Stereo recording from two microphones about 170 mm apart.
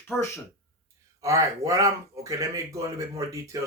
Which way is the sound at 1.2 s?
20° right (ahead or behind).